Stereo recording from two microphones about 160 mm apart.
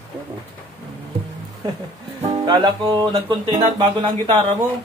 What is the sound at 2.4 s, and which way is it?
Music, 25° right (ahead or behind).